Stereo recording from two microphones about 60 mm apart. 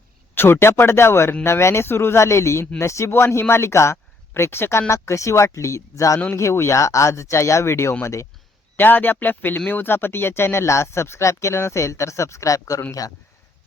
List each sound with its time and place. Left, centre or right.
0.3 s speech: left
4.9 s speech: left
6.3 s speech: left
8.7 s speech: left